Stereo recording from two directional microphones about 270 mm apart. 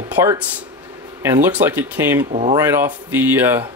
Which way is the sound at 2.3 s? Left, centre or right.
Right.